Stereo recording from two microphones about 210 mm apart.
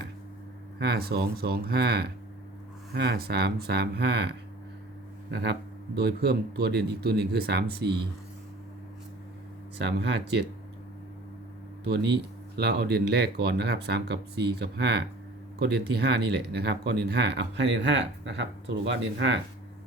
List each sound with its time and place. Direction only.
0.8 s speech: 50° right (ahead or behind)
9.7 s speech: 55° right (ahead or behind)
12.5 s speech: 50° right (ahead or behind)